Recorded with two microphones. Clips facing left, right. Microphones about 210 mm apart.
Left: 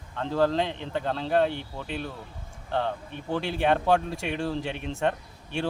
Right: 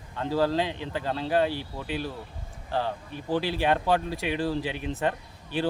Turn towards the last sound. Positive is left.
turn(degrees=0)  # may be behind; listen again after turning